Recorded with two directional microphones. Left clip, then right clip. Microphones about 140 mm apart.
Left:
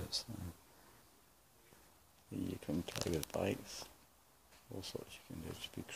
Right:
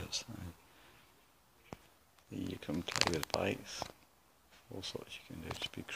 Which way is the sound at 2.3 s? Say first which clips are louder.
Right 1 dB; 10° left (ahead or behind).